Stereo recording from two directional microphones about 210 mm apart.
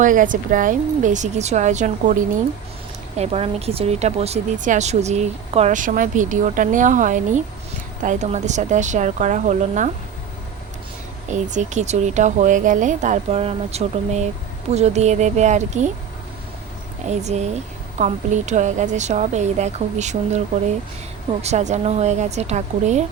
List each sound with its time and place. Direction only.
0.0 s a woman's voice: 40° right (ahead or behind)
3.2 s a woman's voice: 30° right (ahead or behind)
11.3 s a woman's voice: 35° right (ahead or behind)
17.1 s a woman's voice: 30° right (ahead or behind)
21.4 s a woman's voice: 35° right (ahead or behind)